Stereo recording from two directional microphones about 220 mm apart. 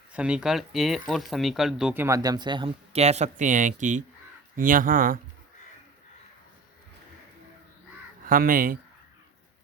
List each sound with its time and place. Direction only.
0.1 s speech: 5° right (ahead or behind); by 5.2 s 40° right (ahead or behind)
8.3 s speech: 40° right (ahead or behind)